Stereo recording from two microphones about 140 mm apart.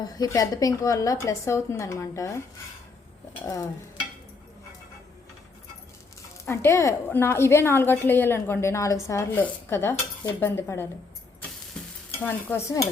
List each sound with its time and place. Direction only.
0.0 s a woman's voice: 25° left (ahead or behind)
3.4 s a woman's voice: 25° left (ahead or behind)
6.4 s a woman's voice: 20° left (ahead or behind)
12.2 s a woman's voice: 15° left (ahead or behind)